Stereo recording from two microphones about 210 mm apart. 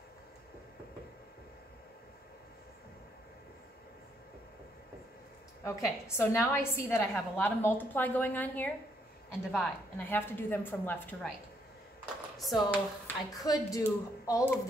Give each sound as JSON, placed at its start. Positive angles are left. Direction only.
{"t": 5.6, "sound": "a woman's voice", "side_deg": 10}
{"t": 12.4, "sound": "speech", "side_deg": 0}
{"t": 13.0, "sound": "a woman's voice", "side_deg": 15}